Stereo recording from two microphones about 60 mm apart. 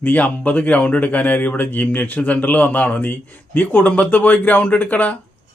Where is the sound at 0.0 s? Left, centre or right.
Left.